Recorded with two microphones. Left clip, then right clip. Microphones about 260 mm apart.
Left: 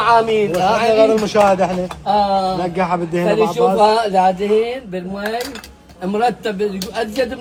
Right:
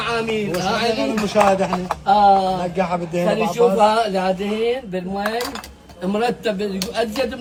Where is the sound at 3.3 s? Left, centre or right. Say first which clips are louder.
Left 2 dB; left.